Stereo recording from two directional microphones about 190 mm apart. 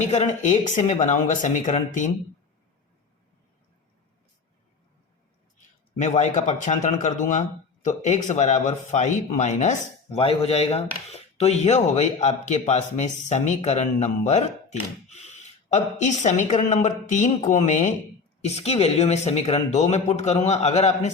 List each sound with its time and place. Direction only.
0.0 s speech: 35° left (ahead or behind)
5.5 s speech: 40° left (ahead or behind)